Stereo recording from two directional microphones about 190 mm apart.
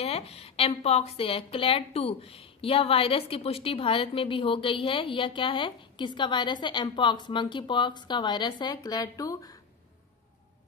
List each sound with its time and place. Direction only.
0.0 s a woman's voice: 30° left (ahead or behind)